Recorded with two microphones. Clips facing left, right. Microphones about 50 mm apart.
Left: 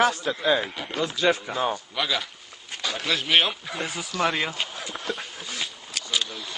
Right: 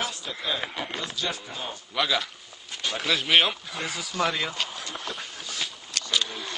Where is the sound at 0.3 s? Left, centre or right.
Left.